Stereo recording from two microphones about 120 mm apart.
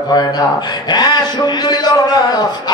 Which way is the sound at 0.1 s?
35° left (ahead or behind).